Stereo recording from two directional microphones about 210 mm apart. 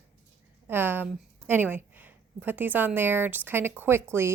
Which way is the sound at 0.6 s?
10° right (ahead or behind).